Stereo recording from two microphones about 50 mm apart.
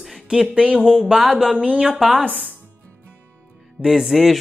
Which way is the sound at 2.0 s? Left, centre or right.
Centre.